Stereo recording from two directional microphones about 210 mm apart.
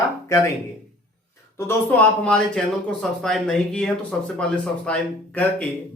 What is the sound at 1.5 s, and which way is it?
A man's voice, 10° left (ahead or behind).